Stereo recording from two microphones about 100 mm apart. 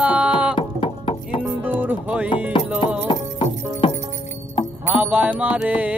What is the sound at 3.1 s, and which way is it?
Music, 60° left (ahead or behind).